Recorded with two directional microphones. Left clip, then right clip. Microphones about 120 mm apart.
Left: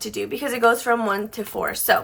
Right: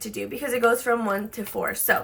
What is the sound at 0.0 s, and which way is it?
Speech, 35° left (ahead or behind).